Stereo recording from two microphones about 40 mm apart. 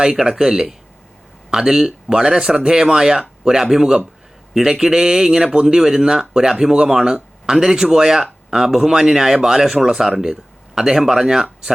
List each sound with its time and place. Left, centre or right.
0.0 s speech: centre